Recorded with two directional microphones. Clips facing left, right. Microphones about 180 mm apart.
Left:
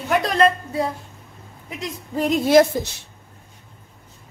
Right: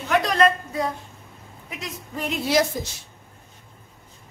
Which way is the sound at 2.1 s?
40° left (ahead or behind).